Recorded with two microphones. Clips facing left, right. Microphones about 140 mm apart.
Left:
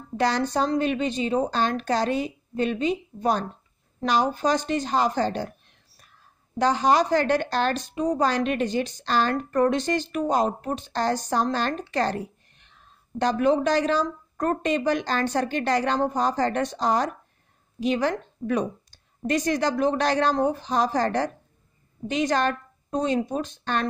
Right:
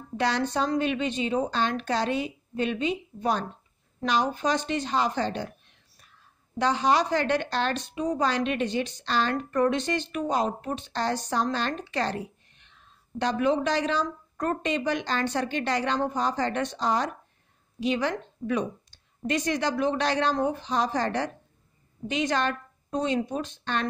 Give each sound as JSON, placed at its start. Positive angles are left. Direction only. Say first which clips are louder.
{"t": 0.2, "sound": "a woman's voice", "louder": "left 3 dB", "side_deg": 40}
{"t": 6.6, "sound": "a woman's voice", "louder": "left 3 dB", "side_deg": 45}